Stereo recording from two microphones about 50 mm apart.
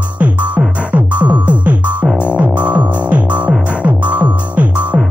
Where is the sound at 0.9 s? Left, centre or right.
Right.